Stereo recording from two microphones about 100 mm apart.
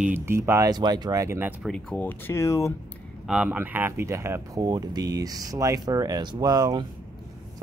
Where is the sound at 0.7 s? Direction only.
45° right (ahead or behind).